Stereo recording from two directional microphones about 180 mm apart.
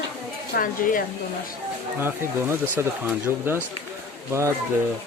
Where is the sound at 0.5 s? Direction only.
50° left (ahead or behind).